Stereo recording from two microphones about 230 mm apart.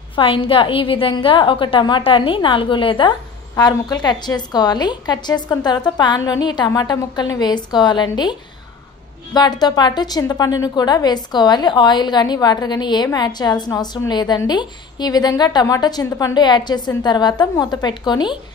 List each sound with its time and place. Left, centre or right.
0.1 s a woman's voice: left